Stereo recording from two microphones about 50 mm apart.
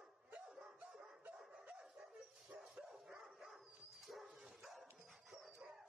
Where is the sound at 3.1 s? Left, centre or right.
Centre.